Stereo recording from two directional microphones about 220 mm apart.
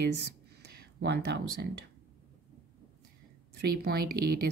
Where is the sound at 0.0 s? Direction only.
45° right (ahead or behind).